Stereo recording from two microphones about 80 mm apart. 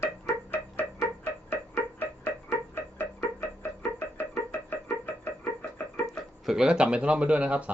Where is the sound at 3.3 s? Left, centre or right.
Left.